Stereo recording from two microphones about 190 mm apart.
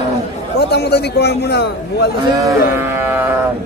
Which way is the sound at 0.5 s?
60° left (ahead or behind).